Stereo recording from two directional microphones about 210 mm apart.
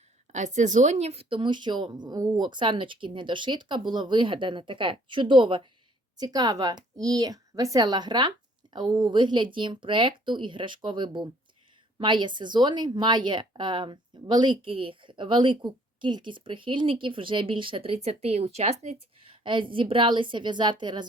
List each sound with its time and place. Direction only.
0.3 s a woman's voice: 35° right (ahead or behind)